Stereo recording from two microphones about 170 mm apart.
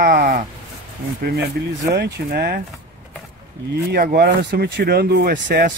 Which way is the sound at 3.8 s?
65° right (ahead or behind).